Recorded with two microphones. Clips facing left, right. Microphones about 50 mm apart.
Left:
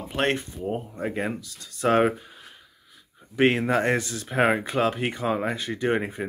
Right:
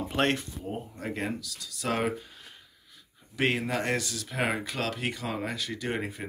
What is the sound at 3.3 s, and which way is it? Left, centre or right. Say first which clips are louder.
Speech: left 7 dB; left.